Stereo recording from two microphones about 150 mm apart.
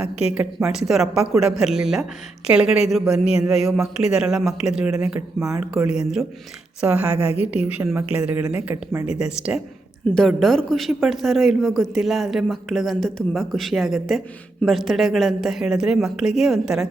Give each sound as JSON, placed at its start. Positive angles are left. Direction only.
{"t": 0.3, "sound": "speech", "side_deg": -5}
{"t": 9.1, "sound": "speech", "side_deg": -5}